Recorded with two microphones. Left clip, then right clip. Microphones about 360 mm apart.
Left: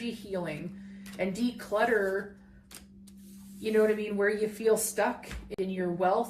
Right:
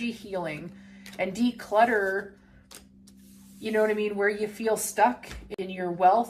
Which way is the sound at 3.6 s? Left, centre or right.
Right.